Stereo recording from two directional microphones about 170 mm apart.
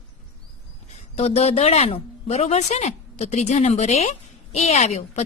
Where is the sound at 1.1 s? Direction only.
40° left (ahead or behind).